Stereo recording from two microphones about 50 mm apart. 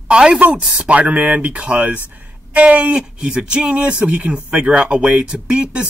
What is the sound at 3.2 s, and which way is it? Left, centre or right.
Speech, centre.